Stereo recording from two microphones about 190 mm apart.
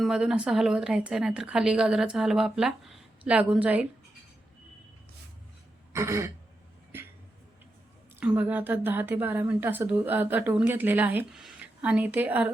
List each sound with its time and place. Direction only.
0.0 s a woman's voice: centre (ahead or behind)
5.9 s throat clearing: 15° right (ahead or behind)
8.2 s speech: 10° right (ahead or behind)